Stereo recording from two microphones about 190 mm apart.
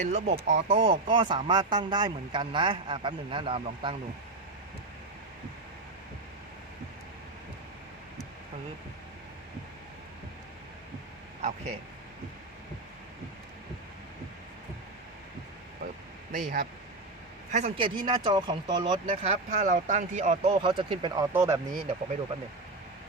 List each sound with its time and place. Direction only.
0.0 s speech: 40° right (ahead or behind)
11.4 s speech: 35° right (ahead or behind)
16.3 s a man's voice: 45° right (ahead or behind)
17.7 s speech: 25° right (ahead or behind)
19.1 s speech: 40° right (ahead or behind)
20.5 s speech: 25° right (ahead or behind)